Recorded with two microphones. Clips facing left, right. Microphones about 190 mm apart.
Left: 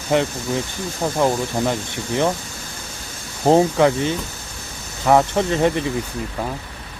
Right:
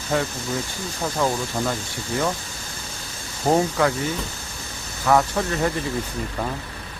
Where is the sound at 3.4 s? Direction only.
25° left (ahead or behind).